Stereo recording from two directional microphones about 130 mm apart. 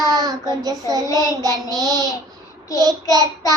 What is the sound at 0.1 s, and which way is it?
Child singing, 30° right (ahead or behind).